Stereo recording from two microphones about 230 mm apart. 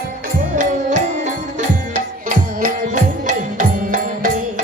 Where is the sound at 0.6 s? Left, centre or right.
Right.